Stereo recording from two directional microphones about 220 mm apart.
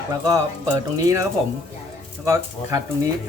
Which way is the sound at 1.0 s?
15° right (ahead or behind).